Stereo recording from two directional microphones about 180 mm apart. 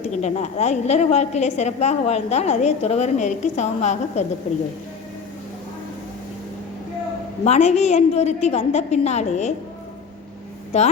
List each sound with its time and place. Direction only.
0.1 s a woman's voice: 40° left (ahead or behind)
7.4 s a woman's voice: 35° left (ahead or behind)
10.7 s a woman's voice: 40° left (ahead or behind)